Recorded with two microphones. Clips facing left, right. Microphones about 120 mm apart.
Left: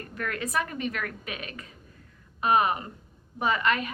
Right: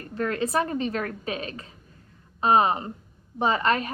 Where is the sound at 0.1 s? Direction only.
30° right (ahead or behind).